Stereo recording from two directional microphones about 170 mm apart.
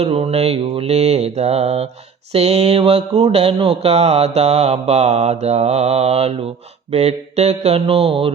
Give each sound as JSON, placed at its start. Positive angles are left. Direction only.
{"t": 0.0, "sound": "mantra", "side_deg": -35}